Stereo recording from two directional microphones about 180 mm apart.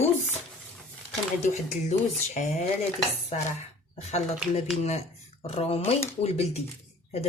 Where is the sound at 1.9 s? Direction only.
40° left (ahead or behind).